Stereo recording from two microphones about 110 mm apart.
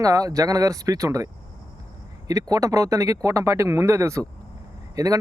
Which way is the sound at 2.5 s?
30° right (ahead or behind).